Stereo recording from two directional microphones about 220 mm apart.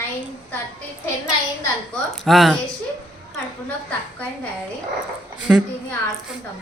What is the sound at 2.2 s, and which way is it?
Speech, centre (ahead or behind).